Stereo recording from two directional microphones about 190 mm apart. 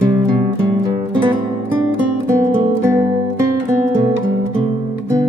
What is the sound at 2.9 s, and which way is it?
Music, 15° right (ahead or behind).